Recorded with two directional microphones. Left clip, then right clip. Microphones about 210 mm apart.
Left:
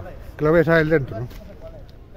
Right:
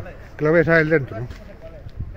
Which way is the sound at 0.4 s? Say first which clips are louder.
Right 1 dB; centre (ahead or behind).